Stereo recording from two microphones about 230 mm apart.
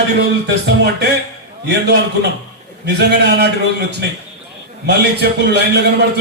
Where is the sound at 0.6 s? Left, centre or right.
Right.